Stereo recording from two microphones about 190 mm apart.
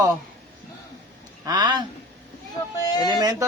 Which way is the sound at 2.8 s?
20° left (ahead or behind).